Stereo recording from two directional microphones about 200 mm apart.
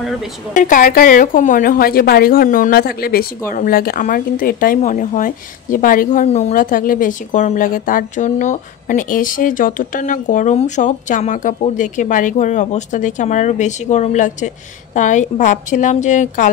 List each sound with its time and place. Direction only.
0.6 s a woman's voice: 40° left (ahead or behind)